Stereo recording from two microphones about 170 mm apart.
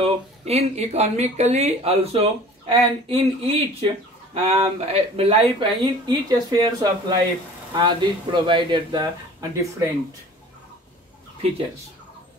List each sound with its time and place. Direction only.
0.0 s speech: 40° right (ahead or behind); by 9.8 s 20° right (ahead or behind)